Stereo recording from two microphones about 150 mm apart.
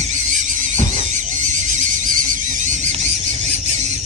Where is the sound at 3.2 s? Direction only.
40° left (ahead or behind).